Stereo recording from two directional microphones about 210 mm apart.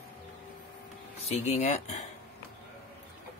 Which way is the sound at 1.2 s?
35° left (ahead or behind).